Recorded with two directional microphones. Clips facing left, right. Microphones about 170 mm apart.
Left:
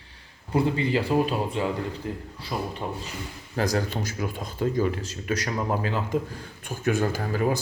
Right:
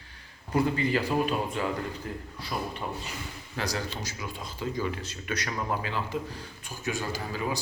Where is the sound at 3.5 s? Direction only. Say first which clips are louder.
Left 7 dB; 50° left (ahead or behind).